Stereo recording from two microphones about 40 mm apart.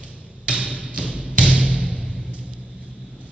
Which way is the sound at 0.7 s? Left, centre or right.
Right.